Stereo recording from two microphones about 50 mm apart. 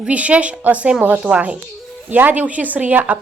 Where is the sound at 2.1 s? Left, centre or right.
Right.